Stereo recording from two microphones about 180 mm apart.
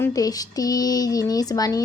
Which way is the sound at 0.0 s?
20° left (ahead or behind).